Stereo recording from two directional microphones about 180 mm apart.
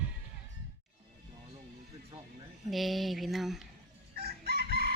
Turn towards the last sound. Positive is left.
turn(degrees=-60)  # may be behind; listen again after turning